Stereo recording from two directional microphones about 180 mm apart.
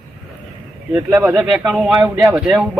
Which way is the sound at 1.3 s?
5° right (ahead or behind).